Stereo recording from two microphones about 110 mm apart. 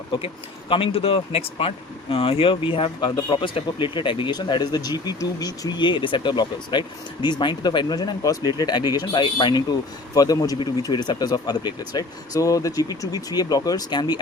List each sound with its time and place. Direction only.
0.7 s speech: 55° left (ahead or behind); by 14.2 s 40° left (ahead or behind)